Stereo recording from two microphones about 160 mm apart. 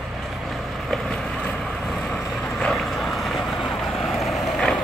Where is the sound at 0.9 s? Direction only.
5° left (ahead or behind).